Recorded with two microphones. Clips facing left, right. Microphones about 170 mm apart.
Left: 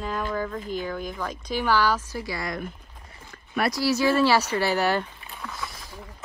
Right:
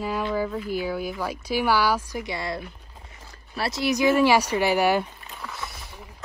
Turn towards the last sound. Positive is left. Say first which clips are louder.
# even
turn(degrees=-5)  # may be behind; listen again after turning